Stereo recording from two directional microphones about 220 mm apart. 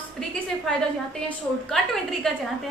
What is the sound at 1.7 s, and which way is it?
Speech, centre (ahead or behind).